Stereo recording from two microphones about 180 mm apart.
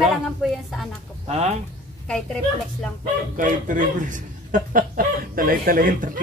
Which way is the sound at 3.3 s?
45° right (ahead or behind).